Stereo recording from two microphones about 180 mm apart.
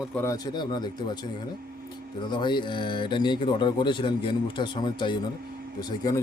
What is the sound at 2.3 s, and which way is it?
A man's voice, 25° left (ahead or behind).